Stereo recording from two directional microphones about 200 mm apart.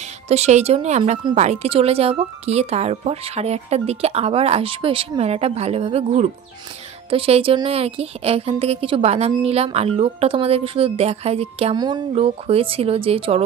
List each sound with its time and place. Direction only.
0.3 s a woman's voice: 30° right (ahead or behind)